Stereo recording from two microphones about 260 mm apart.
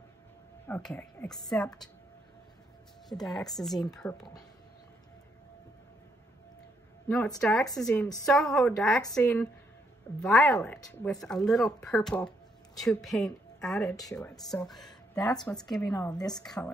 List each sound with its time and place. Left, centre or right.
0.7 s speech: centre
3.1 s speech: centre
7.1 s speech: centre